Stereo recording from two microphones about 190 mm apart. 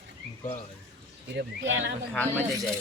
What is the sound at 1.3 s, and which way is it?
Speech, 75° right (ahead or behind).